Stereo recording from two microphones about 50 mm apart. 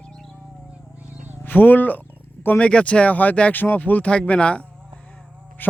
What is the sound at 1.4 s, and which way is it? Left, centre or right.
Speech, left.